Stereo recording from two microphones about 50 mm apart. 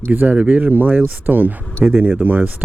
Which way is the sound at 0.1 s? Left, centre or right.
Right.